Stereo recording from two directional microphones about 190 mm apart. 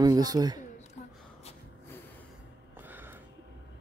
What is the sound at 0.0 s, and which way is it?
Speech, 20° right (ahead or behind).